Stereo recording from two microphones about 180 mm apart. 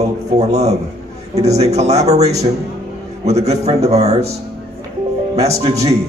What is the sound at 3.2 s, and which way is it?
A man's voice, 35° right (ahead or behind).